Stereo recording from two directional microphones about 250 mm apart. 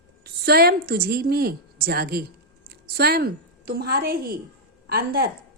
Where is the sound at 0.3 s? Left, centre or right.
Right.